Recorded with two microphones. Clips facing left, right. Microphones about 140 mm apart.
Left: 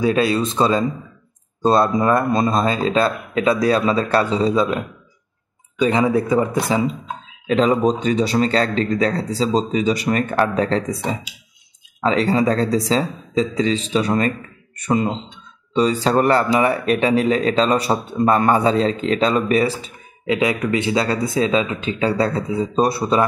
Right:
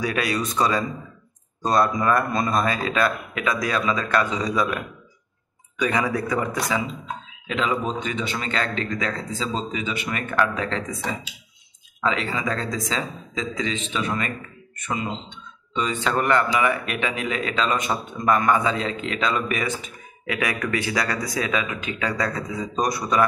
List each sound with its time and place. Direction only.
0.0 s speech: 25° left (ahead or behind)